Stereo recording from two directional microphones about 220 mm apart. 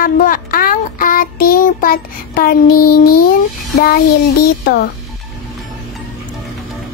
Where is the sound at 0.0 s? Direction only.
40° left (ahead or behind).